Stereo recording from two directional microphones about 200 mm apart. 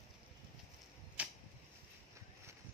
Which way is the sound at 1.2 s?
5° right (ahead or behind).